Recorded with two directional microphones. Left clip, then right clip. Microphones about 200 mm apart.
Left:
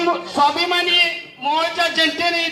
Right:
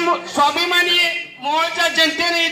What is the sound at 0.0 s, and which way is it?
A man's voice, 15° left (ahead or behind).